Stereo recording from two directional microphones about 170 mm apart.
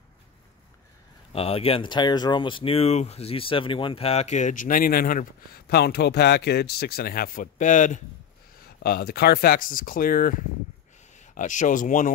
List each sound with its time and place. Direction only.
1.3 s speech: 35° left (ahead or behind)
8.5 s speech: 60° left (ahead or behind)